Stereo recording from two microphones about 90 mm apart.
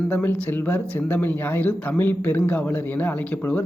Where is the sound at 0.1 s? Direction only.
20° left (ahead or behind).